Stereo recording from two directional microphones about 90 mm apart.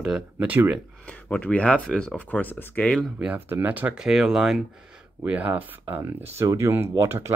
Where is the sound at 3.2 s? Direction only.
20° right (ahead or behind); by 4.6 s 5° right (ahead or behind).